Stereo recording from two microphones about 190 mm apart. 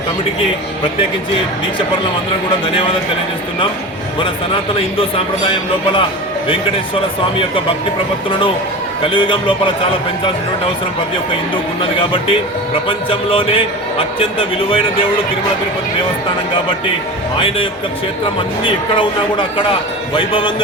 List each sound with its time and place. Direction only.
4.9 s a man's voice: 30° left (ahead or behind)
9.0 s a man's voice: 25° left (ahead or behind)
11.5 s a man's voice: 25° left (ahead or behind)
17.3 s a man's voice: 25° left (ahead or behind)